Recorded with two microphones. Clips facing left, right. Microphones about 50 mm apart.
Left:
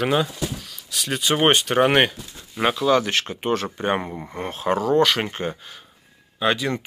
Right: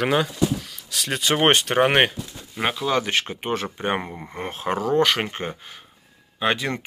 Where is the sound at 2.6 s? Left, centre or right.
Centre; by 5.2 s right.